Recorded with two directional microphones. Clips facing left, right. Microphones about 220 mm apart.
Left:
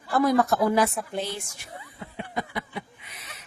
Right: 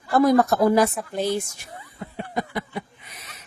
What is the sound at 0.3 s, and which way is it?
Speech, 40° right (ahead or behind).